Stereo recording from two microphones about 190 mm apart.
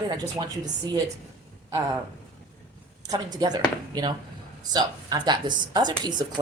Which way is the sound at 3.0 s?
20° right (ahead or behind).